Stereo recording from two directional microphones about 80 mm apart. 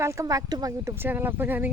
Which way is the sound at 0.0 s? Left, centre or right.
Right.